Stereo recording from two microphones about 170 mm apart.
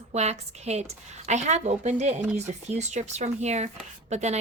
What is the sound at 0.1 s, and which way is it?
Speech, 40° right (ahead or behind).